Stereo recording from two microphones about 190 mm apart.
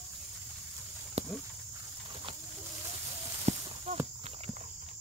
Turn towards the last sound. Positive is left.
turn(degrees=-35)  # may be behind; listen again after turning